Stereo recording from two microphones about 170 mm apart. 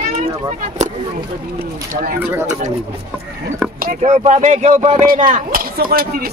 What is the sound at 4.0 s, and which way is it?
Speech, 45° right (ahead or behind).